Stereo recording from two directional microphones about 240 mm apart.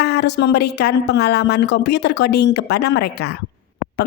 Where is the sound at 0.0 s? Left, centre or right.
Left.